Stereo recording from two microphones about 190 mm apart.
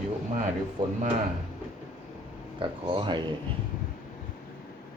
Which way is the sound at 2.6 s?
25° right (ahead or behind).